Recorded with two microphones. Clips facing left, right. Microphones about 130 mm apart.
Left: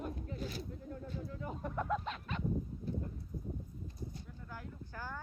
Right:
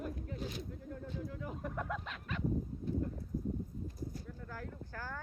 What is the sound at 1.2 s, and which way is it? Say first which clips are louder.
Bird: even; 35° left (ahead or behind).